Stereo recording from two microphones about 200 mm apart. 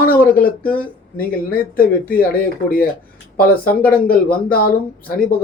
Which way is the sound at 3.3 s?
50° left (ahead or behind).